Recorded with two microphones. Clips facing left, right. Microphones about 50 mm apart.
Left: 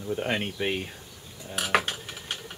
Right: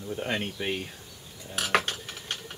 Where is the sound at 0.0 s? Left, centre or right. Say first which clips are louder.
Left 2 dB; centre.